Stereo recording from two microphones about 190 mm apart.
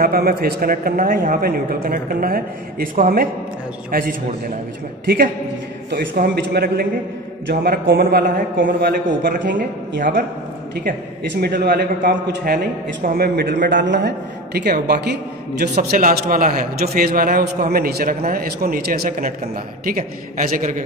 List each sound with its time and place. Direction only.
0.0 s a man's voice: 50° right (ahead or behind)
5.9 s a man's voice: 55° right (ahead or behind)
11.4 s a man's voice: 55° right (ahead or behind)
15.9 s a man's voice: 45° right (ahead or behind)